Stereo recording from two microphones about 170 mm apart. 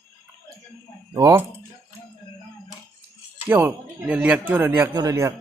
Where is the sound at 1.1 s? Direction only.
20° right (ahead or behind).